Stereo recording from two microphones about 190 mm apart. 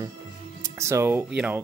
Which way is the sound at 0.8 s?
15° right (ahead or behind).